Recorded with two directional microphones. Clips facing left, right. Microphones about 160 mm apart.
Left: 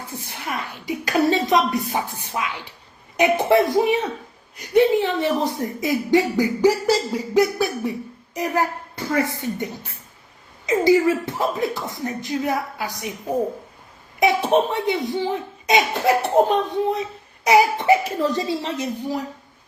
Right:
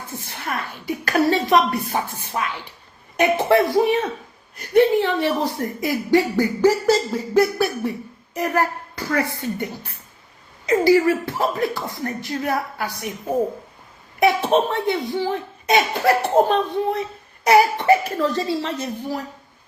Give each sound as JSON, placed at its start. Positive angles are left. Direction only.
{"t": 0.3, "sound": "speech", "side_deg": 15}
{"t": 10.7, "sound": "speech", "side_deg": 20}
{"t": 14.5, "sound": "speech", "side_deg": 15}